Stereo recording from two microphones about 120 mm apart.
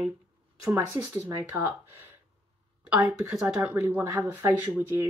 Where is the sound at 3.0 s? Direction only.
25° right (ahead or behind).